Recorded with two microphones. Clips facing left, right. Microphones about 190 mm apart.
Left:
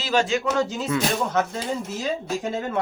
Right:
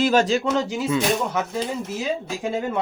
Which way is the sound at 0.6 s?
10° right (ahead or behind).